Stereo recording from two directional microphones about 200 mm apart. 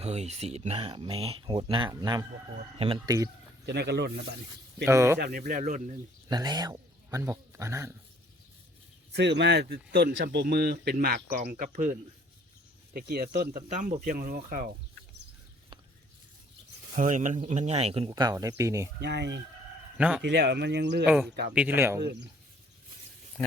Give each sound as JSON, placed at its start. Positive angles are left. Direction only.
{"t": 0.0, "sound": "speech", "side_deg": -35}
{"t": 3.7, "sound": "speech", "side_deg": -60}
{"t": 4.9, "sound": "speech", "side_deg": -15}
{"t": 5.2, "sound": "a man's voice", "side_deg": -45}
{"t": 6.2, "sound": "speech", "side_deg": -20}
{"t": 9.1, "sound": "speech", "side_deg": -60}
{"t": 12.9, "sound": "speech", "side_deg": -50}
{"t": 13.5, "sound": "speech", "side_deg": -40}
{"t": 16.9, "sound": "a man's voice", "side_deg": -40}
{"t": 18.1, "sound": "speech", "side_deg": -20}
{"t": 18.9, "sound": "speech", "side_deg": -55}
{"t": 20.0, "sound": "a man's voice", "side_deg": -5}
{"t": 20.2, "sound": "speech", "side_deg": -55}
{"t": 21.0, "sound": "a man's voice", "side_deg": -5}